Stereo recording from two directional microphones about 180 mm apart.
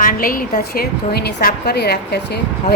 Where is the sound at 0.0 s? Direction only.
50° left (ahead or behind).